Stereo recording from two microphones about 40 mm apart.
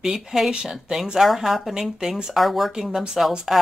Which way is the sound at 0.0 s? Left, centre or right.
Centre.